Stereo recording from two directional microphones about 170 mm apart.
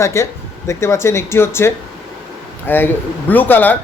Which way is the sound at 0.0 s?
15° left (ahead or behind).